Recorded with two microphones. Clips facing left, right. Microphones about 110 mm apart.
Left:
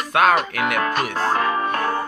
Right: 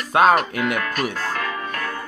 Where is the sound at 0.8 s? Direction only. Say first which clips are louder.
Left 4 dB; 30° left (ahead or behind).